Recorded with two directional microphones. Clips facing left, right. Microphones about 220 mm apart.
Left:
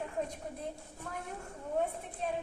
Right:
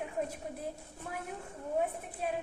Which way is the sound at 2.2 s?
5° right (ahead or behind).